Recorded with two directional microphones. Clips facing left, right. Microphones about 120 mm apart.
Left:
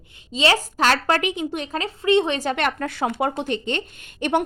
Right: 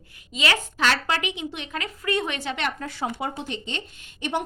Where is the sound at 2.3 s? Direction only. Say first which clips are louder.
Left 6 dB; 45° left (ahead or behind).